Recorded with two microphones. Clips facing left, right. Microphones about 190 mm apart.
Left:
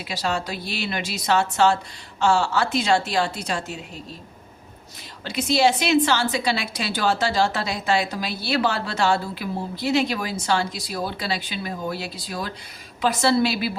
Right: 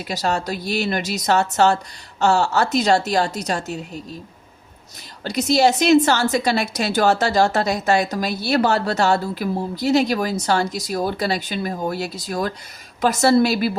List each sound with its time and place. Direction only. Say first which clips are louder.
0.0 s a woman's voice: right 3 dB; 40° right (ahead or behind)
5.2 s a woman's voice: right 3 dB; 40° right (ahead or behind)